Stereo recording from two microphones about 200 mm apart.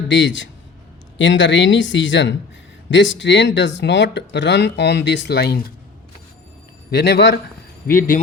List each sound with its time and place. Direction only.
0.1 s speech: 65° left (ahead or behind)
6.9 s speech: 55° left (ahead or behind)